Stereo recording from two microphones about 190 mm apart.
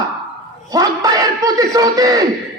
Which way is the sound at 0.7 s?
20° right (ahead or behind).